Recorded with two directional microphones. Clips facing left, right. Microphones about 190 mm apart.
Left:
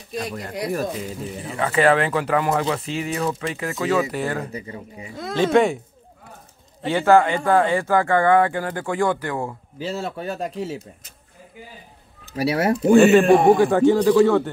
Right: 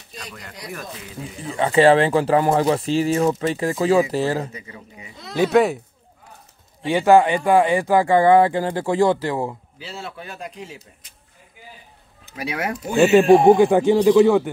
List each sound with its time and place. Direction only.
0.3 s speech: 40° left (ahead or behind)
1.6 s speech: 25° right (ahead or behind)
4.5 s speech: 35° left (ahead or behind)
5.3 s speech: 5° right (ahead or behind)
6.8 s speech: 15° right (ahead or behind)
9.8 s speech: 45° left (ahead or behind)
12.3 s speech: 40° left (ahead or behind)
13.0 s speech: centre (ahead or behind)
13.6 s speech: 20° right (ahead or behind)